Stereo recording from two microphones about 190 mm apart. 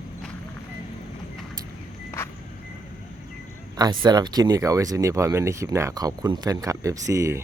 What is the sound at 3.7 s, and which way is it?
Speech, 20° right (ahead or behind).